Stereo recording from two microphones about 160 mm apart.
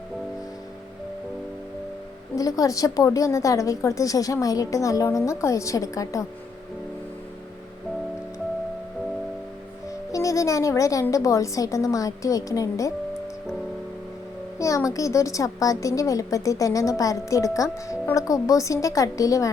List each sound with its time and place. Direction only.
2.3 s a woman's voice: 20° left (ahead or behind)
10.1 s speech: 20° left (ahead or behind)
14.6 s a woman's voice: 20° left (ahead or behind)